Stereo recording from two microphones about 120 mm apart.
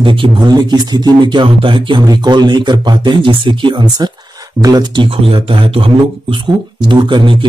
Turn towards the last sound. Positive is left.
turn(degrees=-40)  # may be behind; listen again after turning